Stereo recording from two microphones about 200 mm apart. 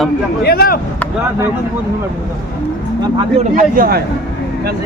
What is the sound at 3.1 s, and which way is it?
Speech, 35° right (ahead or behind).